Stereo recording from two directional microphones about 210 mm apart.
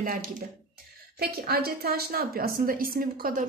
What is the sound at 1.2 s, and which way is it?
A woman's voice, 45° right (ahead or behind).